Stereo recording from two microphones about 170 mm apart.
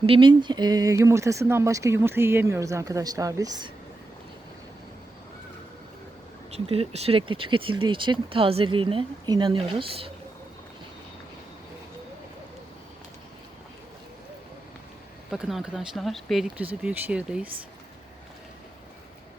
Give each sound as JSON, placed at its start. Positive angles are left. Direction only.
{"t": 0.0, "sound": "speech", "side_deg": -30}
{"t": 6.7, "sound": "speech", "side_deg": -35}
{"t": 15.3, "sound": "speech", "side_deg": 0}